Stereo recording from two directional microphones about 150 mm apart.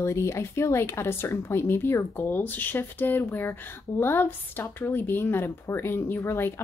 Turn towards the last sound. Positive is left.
turn(degrees=15)  # may be behind; listen again after turning